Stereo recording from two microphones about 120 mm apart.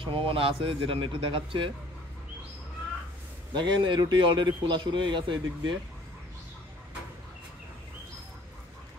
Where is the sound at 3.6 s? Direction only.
40° right (ahead or behind).